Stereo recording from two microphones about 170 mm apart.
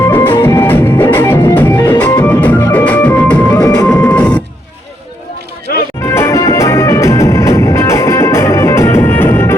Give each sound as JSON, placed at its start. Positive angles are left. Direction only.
{"t": 0.1, "sound": "music", "side_deg": 10}
{"t": 6.1, "sound": "music", "side_deg": 15}